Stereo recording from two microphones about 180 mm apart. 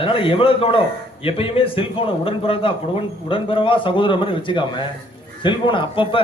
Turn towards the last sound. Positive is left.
turn(degrees=30)  # may be behind; listen again after turning